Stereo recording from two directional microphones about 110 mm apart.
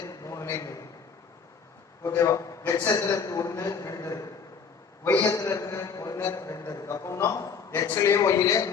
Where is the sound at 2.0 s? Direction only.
25° left (ahead or behind).